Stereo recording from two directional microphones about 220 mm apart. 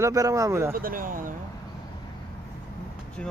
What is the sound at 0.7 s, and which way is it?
Speech, 40° right (ahead or behind).